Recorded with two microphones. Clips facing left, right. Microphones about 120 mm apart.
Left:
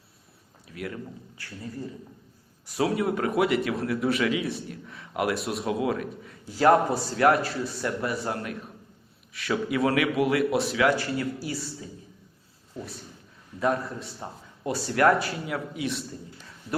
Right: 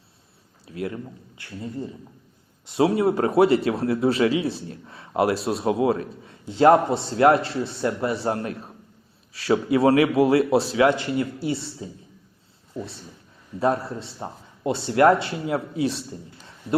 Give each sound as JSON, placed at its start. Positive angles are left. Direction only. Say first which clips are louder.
{"t": 0.7, "sound": "speech", "louder": "right 5 dB", "side_deg": -25}
{"t": 13.6, "sound": "speech", "louder": "right 3 dB", "side_deg": -30}